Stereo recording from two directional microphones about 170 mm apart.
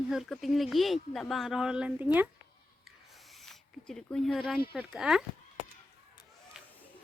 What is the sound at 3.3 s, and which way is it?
Speech, centre (ahead or behind).